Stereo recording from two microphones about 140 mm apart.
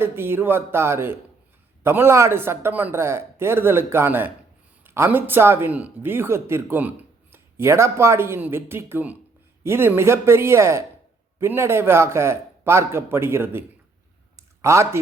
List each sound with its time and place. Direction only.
0.0 s speech: 15° right (ahead or behind)